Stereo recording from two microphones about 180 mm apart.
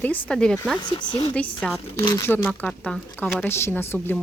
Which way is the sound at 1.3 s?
5° left (ahead or behind).